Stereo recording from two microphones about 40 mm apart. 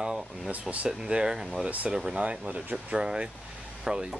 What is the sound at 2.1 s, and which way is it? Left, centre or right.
Speech, right.